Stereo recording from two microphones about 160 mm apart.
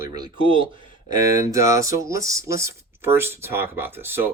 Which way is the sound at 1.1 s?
20° right (ahead or behind).